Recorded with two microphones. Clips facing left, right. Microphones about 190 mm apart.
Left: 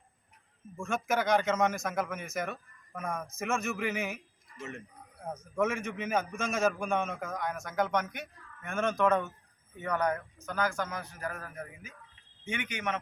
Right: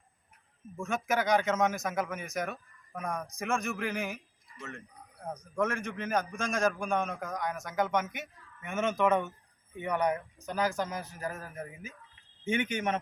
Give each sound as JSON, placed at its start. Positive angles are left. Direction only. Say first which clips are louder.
{"t": 0.8, "sound": "a man's voice", "louder": "even", "side_deg": 0}
{"t": 5.2, "sound": "a man's voice", "louder": "left 1 dB", "side_deg": 5}
{"t": 10.7, "sound": "a man's voice", "louder": "right 2 dB", "side_deg": -35}
{"t": 11.2, "sound": "a man's voice", "louder": "right 1 dB", "side_deg": -25}